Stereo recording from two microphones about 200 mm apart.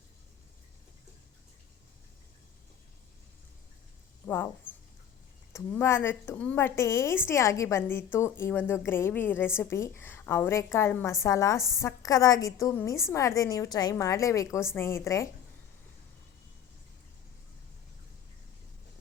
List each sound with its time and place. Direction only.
5.5 s a woman's voice: 15° left (ahead or behind)